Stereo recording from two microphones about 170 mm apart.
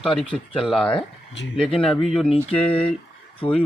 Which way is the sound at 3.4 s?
30° left (ahead or behind).